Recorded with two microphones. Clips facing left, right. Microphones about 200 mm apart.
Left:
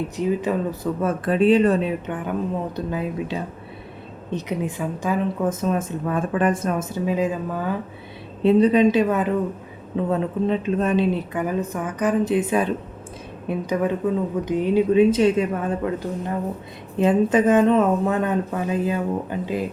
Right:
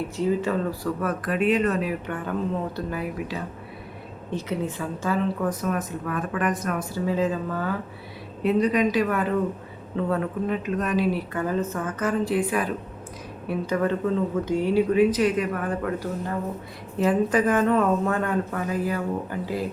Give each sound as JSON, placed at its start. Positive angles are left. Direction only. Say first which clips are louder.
{"t": 0.2, "sound": "speech", "louder": "left 1 dB", "side_deg": 20}
{"t": 8.4, "sound": "speech", "louder": "left 6 dB", "side_deg": 30}